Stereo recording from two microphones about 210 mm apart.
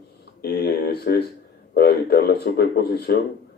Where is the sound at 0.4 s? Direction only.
50° left (ahead or behind).